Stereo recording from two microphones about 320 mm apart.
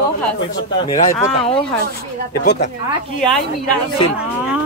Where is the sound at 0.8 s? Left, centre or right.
Left.